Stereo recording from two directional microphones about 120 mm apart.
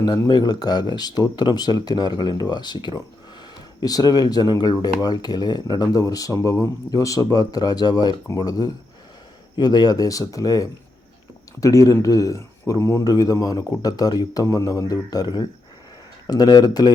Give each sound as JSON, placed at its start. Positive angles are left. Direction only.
{"t": 0.3, "sound": "speech", "side_deg": 35}